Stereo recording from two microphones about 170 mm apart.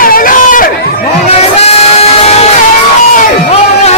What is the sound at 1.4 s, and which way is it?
Music, 40° left (ahead or behind).